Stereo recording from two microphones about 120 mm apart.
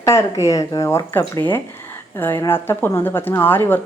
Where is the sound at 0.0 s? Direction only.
25° left (ahead or behind).